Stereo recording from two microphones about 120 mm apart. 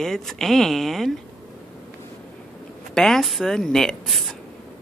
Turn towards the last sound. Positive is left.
turn(degrees=0)  # may be behind; listen again after turning